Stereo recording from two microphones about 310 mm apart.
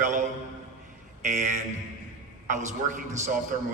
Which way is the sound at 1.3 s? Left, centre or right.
Right.